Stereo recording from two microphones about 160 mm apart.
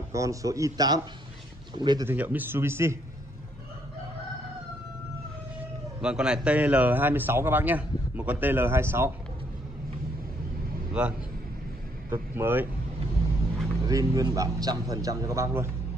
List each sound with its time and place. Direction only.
0.1 s a man's voice: 20° right (ahead or behind)
2.0 s a man's voice: 10° right (ahead or behind)
5.9 s a man's voice: 5° right (ahead or behind)
10.9 s a man's voice: 5° right (ahead or behind)
13.8 s a man's voice: 20° right (ahead or behind)